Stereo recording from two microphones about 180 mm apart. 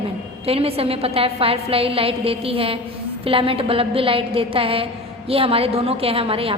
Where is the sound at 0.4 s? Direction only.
30° right (ahead or behind).